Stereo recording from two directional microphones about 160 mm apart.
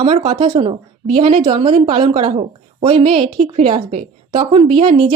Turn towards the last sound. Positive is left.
turn(degrees=-30)  # may be behind; listen again after turning